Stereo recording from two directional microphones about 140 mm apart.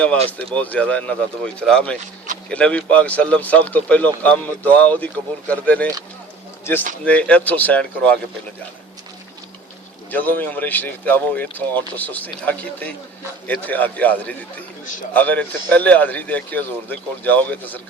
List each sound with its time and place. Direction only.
0.5 s speech: 10° left (ahead or behind)
10.1 s speech: 10° left (ahead or behind)